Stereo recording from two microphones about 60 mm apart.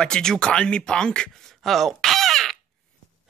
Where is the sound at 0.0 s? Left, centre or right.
Centre.